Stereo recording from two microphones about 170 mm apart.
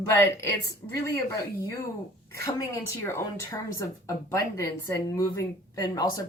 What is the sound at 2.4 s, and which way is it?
Speech, 20° left (ahead or behind).